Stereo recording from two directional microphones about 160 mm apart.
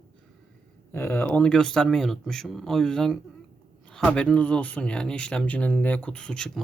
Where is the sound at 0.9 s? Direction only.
15° left (ahead or behind).